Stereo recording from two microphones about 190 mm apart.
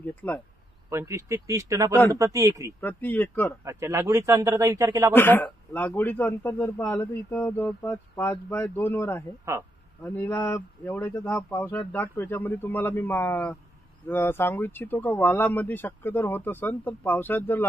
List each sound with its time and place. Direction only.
0.0 s a man's voice: 10° left (ahead or behind)
0.8 s a man's voice: 15° right (ahead or behind)
2.8 s a man's voice: 10° left (ahead or behind)
3.6 s a man's voice: 15° right (ahead or behind)
5.1 s a man's voice: 10° left (ahead or behind)
9.4 s a man's voice: 15° right (ahead or behind)
10.0 s a man's voice: 10° left (ahead or behind)